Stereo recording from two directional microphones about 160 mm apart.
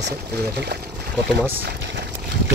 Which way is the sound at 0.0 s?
90° right.